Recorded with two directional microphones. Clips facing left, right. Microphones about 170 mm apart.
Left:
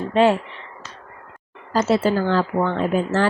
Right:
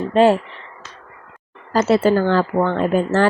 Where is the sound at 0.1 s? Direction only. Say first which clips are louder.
Right 3 dB; 40° right (ahead or behind).